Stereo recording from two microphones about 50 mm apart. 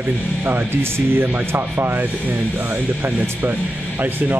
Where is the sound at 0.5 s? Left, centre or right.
Right.